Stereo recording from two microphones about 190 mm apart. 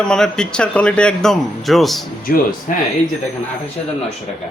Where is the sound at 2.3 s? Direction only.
50° left (ahead or behind).